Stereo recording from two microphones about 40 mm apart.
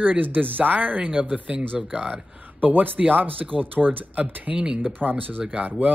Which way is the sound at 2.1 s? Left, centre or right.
Right.